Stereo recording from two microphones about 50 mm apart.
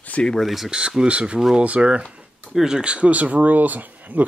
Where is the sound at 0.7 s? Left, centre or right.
Centre.